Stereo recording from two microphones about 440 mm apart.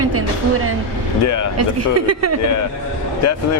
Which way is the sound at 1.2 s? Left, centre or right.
Left.